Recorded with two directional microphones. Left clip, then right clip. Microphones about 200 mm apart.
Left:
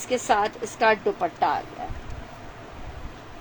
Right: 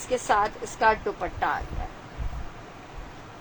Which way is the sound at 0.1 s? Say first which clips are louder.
Left 1 dB; 35° left (ahead or behind).